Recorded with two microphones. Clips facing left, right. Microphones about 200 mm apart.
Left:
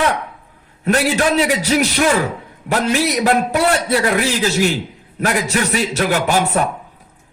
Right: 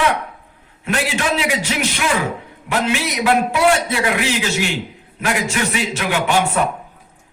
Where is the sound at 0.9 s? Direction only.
40° left (ahead or behind).